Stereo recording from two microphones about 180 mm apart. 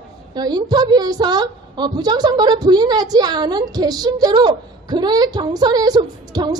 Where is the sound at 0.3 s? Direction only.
20° right (ahead or behind).